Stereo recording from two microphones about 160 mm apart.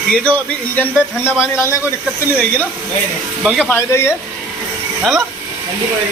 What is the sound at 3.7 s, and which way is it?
Speech, 15° left (ahead or behind).